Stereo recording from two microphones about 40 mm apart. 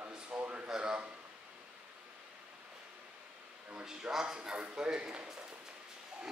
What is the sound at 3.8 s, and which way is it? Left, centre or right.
Speech, centre.